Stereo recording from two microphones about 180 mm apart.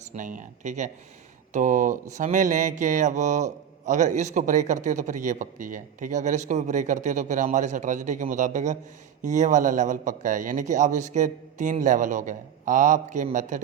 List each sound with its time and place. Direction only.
0.1 s speech: 45° right (ahead or behind)
1.5 s mantra: 45° right (ahead or behind)